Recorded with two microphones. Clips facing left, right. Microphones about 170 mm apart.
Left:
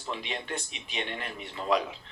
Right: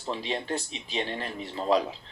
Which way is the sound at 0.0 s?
30° right (ahead or behind).